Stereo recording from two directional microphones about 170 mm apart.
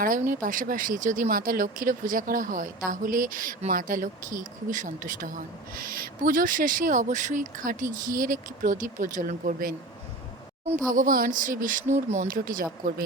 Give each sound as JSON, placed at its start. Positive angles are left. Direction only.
{"t": 0.0, "sound": "speech", "side_deg": -55}
{"t": 10.8, "sound": "speech", "side_deg": -50}